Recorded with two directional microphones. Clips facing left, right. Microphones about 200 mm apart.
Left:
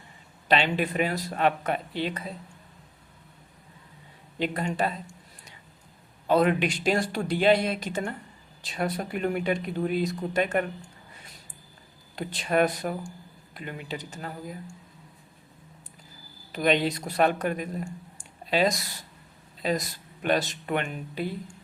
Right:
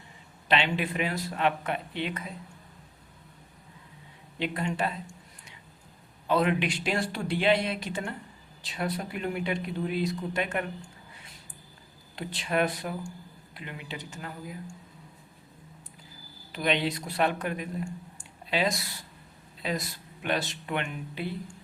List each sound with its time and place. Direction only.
0.4 s speech: 40° left (ahead or behind)
4.4 s speech: 40° left (ahead or behind)
6.2 s speech: 40° left (ahead or behind)
12.1 s speech: 45° left (ahead or behind)
16.5 s speech: 45° left (ahead or behind)
18.2 s a sound: 40° left (ahead or behind)
20.2 s speech: 40° left (ahead or behind)